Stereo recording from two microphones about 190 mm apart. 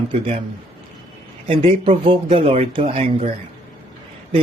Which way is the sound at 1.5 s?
30° right (ahead or behind).